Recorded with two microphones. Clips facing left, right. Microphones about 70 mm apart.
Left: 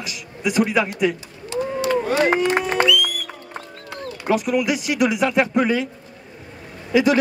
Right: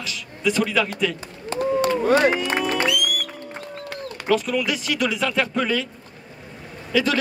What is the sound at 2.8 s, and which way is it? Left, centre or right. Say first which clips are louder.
Music: left 3 dB; right.